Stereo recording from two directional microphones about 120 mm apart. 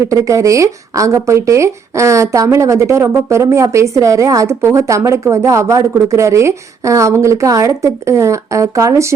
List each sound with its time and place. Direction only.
0.0 s speech: 25° right (ahead or behind)